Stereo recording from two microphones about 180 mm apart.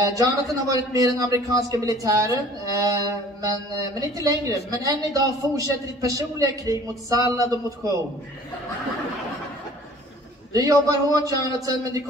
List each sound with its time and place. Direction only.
0.0 s a woman's voice: 20° right (ahead or behind)
4.0 s a woman's voice: 20° right (ahead or behind)
10.5 s a woman's voice: 20° right (ahead or behind)